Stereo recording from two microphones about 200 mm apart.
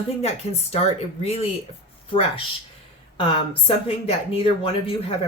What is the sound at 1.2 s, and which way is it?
Speech, 30° left (ahead or behind).